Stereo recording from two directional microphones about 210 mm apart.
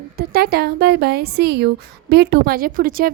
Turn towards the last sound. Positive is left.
turn(degrees=-45)  # may be behind; listen again after turning